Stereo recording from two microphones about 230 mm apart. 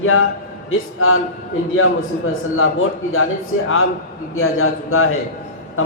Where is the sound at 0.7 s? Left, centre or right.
Left.